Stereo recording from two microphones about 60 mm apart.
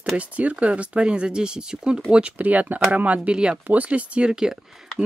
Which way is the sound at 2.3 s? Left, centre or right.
Right.